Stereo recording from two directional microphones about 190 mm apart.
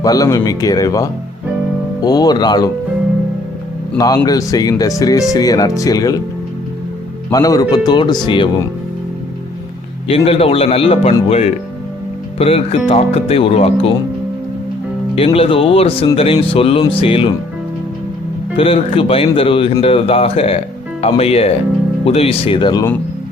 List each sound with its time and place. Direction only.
0.0 s speech: 20° left (ahead or behind)
3.9 s speech: 20° left (ahead or behind)
7.3 s speech: 20° left (ahead or behind)
10.1 s a man's voice: 30° left (ahead or behind)
15.1 s a man's voice: 30° left (ahead or behind)
18.5 s a man's voice: 30° left (ahead or behind)